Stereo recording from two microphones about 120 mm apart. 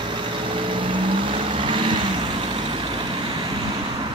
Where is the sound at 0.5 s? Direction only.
45° right (ahead or behind).